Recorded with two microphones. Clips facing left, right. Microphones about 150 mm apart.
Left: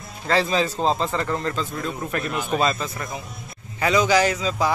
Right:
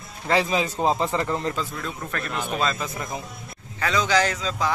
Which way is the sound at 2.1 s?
15° left (ahead or behind).